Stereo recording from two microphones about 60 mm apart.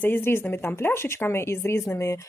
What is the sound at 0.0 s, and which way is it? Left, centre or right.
A woman's voice, left.